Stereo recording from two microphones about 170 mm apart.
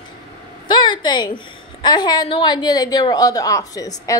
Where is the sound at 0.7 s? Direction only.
25° left (ahead or behind).